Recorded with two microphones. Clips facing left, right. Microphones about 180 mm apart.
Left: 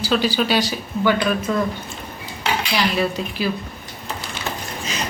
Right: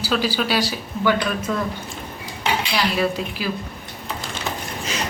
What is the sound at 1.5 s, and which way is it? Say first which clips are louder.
Speech: left 2 dB; 5° left (ahead or behind).